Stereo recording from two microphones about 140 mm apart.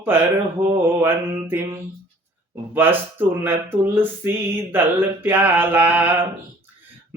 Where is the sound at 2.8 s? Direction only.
15° right (ahead or behind).